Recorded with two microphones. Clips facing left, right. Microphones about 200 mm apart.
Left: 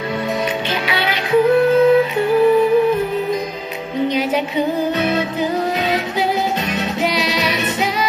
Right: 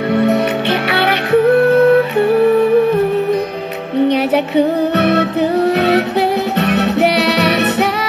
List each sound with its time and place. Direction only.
0.1 s music: 60° right (ahead or behind)
4.1 s music: 65° right (ahead or behind)